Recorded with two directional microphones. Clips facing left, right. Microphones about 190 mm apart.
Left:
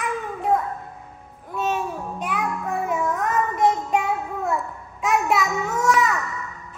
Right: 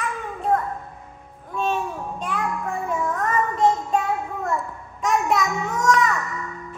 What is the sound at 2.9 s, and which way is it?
Child singing, 10° left (ahead or behind).